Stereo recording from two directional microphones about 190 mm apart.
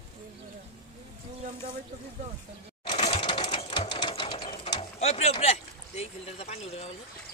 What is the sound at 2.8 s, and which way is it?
Sewing machine, 30° left (ahead or behind).